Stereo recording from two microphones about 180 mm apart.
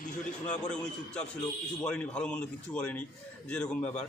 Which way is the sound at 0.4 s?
45° left (ahead or behind).